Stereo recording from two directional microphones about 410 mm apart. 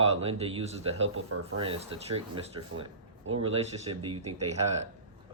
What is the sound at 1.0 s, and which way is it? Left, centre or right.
Speech, right.